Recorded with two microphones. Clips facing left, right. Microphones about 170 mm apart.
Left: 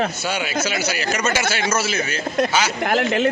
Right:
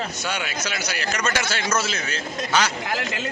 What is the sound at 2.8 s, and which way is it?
Speech, 60° left (ahead or behind).